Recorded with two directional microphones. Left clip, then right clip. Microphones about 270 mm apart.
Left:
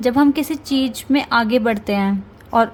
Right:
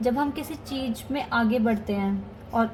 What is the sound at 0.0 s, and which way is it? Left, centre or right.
A woman's voice, left.